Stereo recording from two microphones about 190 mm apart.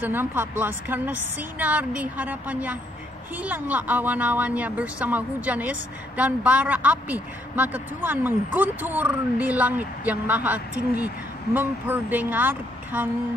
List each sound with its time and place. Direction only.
0.0 s speech: 10° right (ahead or behind)